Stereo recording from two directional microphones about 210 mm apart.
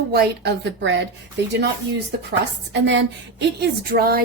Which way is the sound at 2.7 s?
60° right (ahead or behind).